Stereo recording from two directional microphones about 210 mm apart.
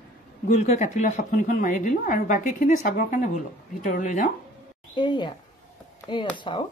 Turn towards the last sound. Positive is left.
turn(degrees=20)  # may be behind; listen again after turning